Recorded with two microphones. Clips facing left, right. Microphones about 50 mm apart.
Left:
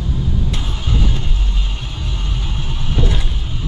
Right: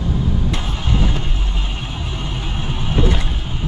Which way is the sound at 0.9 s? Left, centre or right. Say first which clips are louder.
Right 1 dB; right.